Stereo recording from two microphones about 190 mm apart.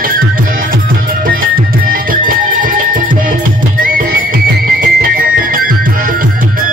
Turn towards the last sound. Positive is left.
turn(degrees=-50)  # may be behind; listen again after turning